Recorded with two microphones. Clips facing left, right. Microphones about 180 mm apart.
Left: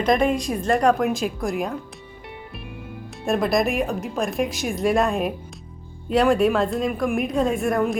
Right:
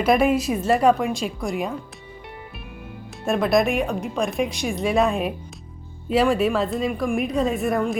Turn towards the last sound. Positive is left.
turn(degrees=0)  # may be behind; listen again after turning